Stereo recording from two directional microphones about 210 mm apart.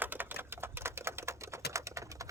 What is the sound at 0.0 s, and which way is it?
Typewriter, 10° right (ahead or behind).